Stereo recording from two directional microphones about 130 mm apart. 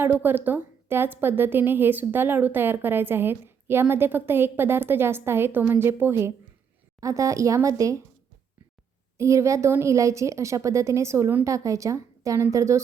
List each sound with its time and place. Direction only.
0.0 s a woman's voice: 15° right (ahead or behind)
9.1 s a woman's voice: 20° right (ahead or behind)